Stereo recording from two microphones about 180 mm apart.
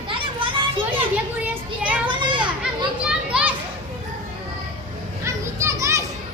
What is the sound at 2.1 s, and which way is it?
Children playing, 25° right (ahead or behind).